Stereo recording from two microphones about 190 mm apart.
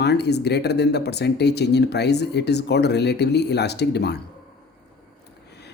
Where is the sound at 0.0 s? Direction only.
60° left (ahead or behind).